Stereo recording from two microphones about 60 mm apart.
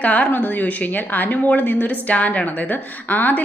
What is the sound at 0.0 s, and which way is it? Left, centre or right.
A woman's voice, left.